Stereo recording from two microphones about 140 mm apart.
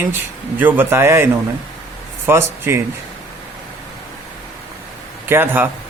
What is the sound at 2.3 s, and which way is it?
Speech, 15° right (ahead or behind).